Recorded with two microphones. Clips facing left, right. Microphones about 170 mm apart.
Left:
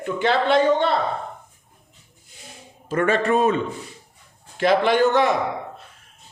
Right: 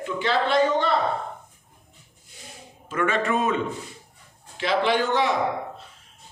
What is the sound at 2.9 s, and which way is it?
Speech, 35° left (ahead or behind).